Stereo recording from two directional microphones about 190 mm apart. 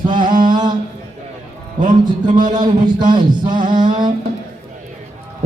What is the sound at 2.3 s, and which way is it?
Speech, 40° right (ahead or behind).